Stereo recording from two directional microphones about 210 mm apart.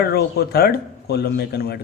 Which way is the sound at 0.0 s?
50° left (ahead or behind).